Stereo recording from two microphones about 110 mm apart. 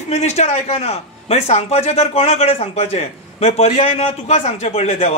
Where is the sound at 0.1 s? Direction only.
90° left.